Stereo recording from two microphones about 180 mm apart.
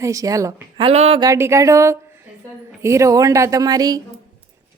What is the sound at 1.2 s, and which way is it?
A woman's voice, 15° right (ahead or behind).